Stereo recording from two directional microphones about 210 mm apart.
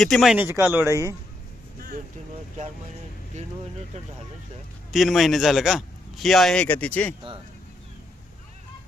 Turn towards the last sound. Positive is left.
turn(degrees=5)  # may be behind; listen again after turning